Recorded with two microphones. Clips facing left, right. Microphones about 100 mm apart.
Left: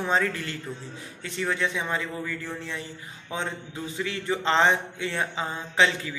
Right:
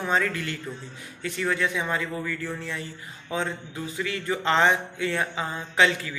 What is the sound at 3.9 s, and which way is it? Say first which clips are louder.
A man's voice: even; 25° left (ahead or behind).